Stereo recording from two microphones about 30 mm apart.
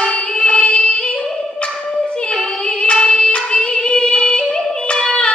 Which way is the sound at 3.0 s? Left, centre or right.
Left.